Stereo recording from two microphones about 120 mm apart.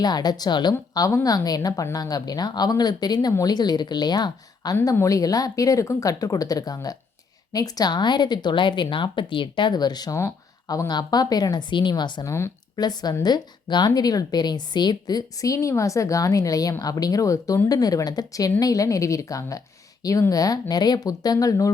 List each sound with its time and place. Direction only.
0.0 s a woman's voice: 35° left (ahead or behind)